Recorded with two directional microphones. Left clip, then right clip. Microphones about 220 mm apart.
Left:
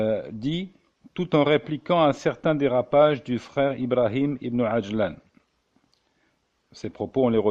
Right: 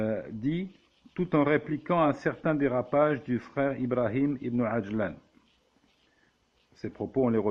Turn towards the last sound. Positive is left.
turn(degrees=40)  # may be behind; listen again after turning